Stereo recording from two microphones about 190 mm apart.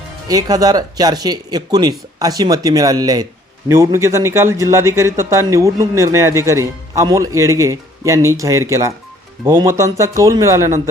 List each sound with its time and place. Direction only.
0.3 s a man's voice: 20° right (ahead or behind)